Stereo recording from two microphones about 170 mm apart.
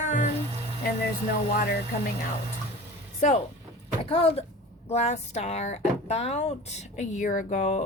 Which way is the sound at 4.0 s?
35° left (ahead or behind).